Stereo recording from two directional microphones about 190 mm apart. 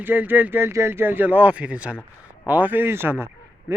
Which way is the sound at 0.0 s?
10° right (ahead or behind).